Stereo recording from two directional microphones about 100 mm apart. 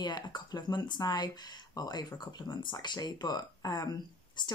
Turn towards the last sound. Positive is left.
turn(degrees=40)  # may be behind; listen again after turning